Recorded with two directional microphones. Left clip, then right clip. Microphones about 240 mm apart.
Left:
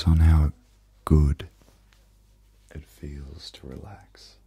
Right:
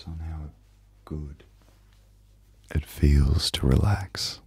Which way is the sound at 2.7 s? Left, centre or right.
Right.